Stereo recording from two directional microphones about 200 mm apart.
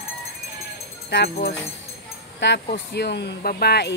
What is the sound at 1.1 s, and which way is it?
A woman's voice, 55° left (ahead or behind).